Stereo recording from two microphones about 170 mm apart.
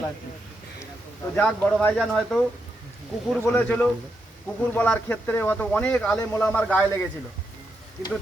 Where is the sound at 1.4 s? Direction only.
5° left (ahead or behind).